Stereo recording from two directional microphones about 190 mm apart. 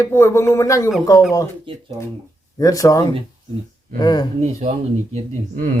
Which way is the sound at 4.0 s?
20° left (ahead or behind).